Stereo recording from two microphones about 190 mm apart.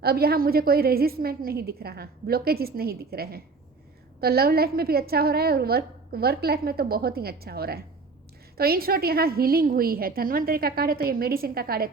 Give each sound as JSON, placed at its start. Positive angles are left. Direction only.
{"t": 0.0, "sound": "a woman's voice", "side_deg": -55}